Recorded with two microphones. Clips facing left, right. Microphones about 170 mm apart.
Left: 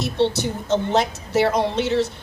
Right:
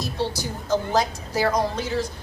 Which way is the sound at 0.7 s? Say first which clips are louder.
Left 2 dB; 25° left (ahead or behind).